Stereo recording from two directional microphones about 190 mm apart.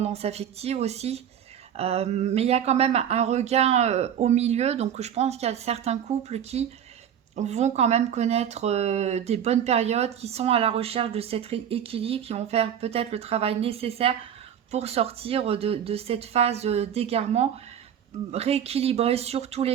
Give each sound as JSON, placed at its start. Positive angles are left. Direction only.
{"t": 0.0, "sound": "speech", "side_deg": -35}